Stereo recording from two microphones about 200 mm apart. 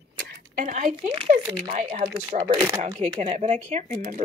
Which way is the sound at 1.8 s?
35° right (ahead or behind).